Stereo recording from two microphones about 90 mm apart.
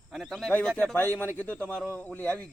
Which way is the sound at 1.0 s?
20° left (ahead or behind).